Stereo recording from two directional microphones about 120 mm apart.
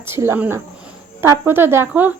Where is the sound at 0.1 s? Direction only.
20° right (ahead or behind).